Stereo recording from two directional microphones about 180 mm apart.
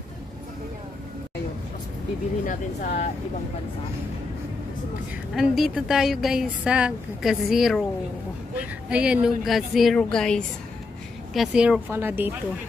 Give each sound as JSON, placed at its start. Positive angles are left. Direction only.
{"t": 2.4, "sound": "speech", "side_deg": 50}
{"t": 5.3, "sound": "a woman's voice", "side_deg": 0}